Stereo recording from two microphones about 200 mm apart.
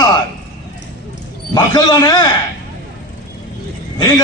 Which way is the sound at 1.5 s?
20° left (ahead or behind).